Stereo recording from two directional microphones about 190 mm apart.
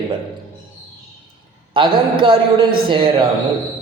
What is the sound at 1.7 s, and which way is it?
A man's voice, 25° right (ahead or behind).